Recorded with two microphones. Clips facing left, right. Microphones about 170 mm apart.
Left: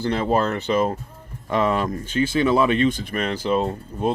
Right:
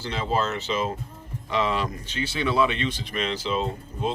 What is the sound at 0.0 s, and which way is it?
Speech, 55° left (ahead or behind).